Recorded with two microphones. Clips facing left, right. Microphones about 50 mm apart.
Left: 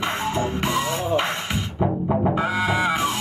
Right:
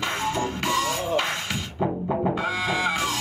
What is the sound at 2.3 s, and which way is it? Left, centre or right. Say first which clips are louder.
Music: left 4 dB; left.